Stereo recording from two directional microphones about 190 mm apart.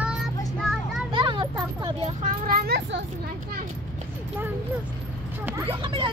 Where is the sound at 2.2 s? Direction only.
50° right (ahead or behind).